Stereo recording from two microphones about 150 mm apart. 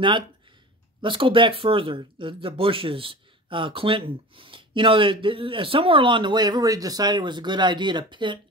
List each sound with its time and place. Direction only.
1.0 s speech: 35° right (ahead or behind)